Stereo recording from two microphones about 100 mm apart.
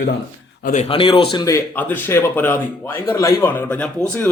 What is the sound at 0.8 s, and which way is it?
Speech, 65° left (ahead or behind).